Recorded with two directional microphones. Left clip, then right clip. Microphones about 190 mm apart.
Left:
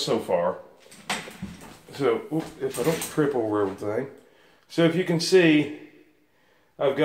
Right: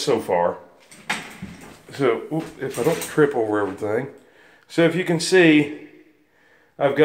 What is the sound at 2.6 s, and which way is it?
Speech, 40° right (ahead or behind).